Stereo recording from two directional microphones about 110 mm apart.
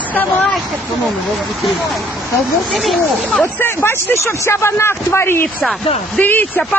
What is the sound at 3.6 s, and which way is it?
Speech, 20° left (ahead or behind).